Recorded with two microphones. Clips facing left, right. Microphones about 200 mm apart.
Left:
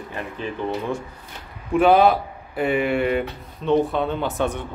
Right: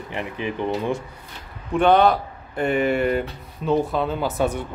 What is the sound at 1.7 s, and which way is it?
Speech, 5° left (ahead or behind).